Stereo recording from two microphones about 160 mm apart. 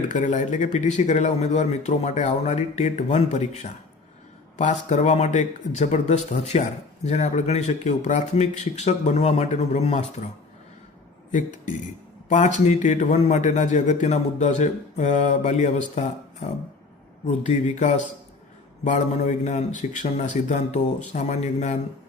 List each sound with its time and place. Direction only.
0.1 s speech: 50° left (ahead or behind)
11.3 s speech: 50° left (ahead or behind)
17.2 s speech: 45° left (ahead or behind)